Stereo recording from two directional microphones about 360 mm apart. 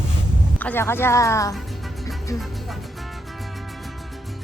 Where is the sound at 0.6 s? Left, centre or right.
Centre.